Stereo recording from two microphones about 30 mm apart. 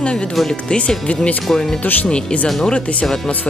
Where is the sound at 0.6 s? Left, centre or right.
Left.